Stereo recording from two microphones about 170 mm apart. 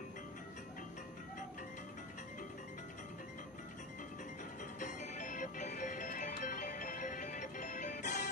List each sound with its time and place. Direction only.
4.7 s music: 45° left (ahead or behind)